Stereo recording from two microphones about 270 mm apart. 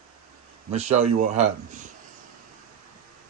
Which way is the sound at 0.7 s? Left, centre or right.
Right.